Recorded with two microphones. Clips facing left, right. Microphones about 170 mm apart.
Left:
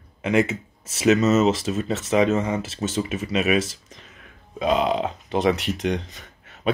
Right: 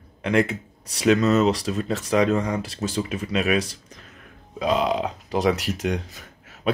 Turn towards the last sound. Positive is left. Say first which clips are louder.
# even
turn(degrees=0)  # may be behind; listen again after turning